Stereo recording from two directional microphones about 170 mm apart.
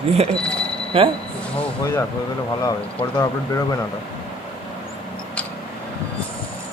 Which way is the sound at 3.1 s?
15° left (ahead or behind).